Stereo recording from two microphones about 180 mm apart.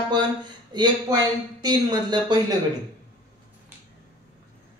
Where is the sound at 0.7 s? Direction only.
25° right (ahead or behind).